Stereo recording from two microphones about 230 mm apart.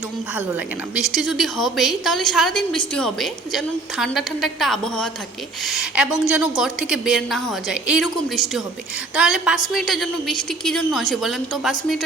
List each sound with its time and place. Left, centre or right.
0.9 s a woman's voice: centre